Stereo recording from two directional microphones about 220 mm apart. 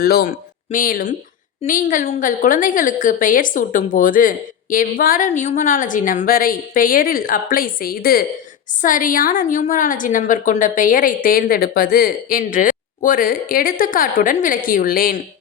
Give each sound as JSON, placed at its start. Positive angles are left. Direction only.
{"t": 0.0, "sound": "a woman's voice", "side_deg": 45}